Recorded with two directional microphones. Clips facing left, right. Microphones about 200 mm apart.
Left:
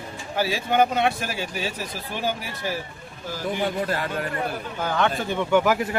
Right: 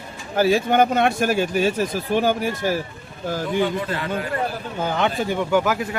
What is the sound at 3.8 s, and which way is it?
Speech, 40° left (ahead or behind).